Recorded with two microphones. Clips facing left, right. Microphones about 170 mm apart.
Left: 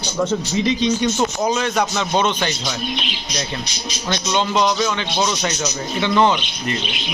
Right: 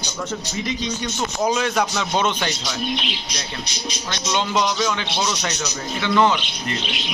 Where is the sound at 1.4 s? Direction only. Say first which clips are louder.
Right 4 dB; 5° right (ahead or behind).